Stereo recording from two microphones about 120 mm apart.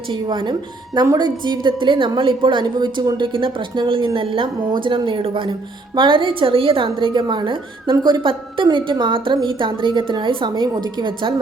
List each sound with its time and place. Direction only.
0.1 s a woman's voice: 40° right (ahead or behind)